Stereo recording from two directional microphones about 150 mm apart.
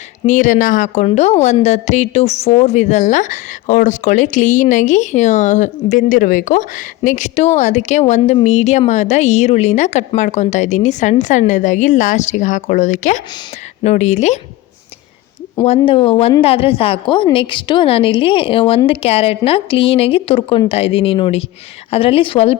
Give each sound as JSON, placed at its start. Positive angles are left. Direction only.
{"t": 0.3, "sound": "speech", "side_deg": 55}
{"t": 1.0, "sound": "a woman's voice", "side_deg": 45}
{"t": 15.6, "sound": "a woman's voice", "side_deg": 40}